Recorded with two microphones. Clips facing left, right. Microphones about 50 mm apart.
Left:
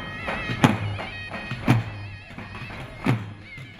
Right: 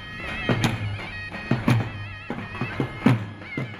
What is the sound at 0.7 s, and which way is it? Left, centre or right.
Music, left.